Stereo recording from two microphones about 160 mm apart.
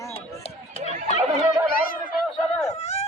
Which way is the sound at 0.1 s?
40° left (ahead or behind).